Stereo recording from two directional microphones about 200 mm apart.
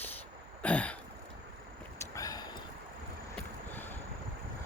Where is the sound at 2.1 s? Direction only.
20° left (ahead or behind).